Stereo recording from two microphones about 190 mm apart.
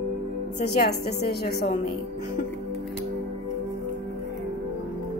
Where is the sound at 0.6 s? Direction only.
60° left (ahead or behind).